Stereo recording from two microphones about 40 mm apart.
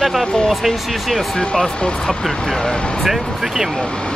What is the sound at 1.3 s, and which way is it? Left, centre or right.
Speech, centre.